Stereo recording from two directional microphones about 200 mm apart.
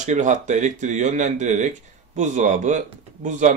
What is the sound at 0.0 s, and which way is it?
Speech, 35° right (ahead or behind).